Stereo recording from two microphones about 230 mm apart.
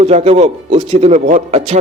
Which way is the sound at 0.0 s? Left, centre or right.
Right.